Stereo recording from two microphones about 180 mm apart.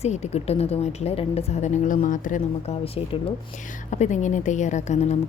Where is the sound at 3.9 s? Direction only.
40° left (ahead or behind).